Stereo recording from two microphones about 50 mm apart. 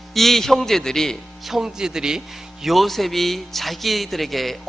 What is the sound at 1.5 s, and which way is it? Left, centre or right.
A man's voice, centre.